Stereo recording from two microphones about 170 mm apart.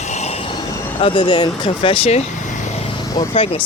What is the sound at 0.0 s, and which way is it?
Train, 40° left (ahead or behind).